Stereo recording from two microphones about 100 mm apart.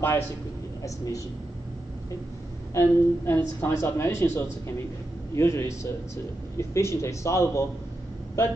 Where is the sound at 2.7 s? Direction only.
25° left (ahead or behind).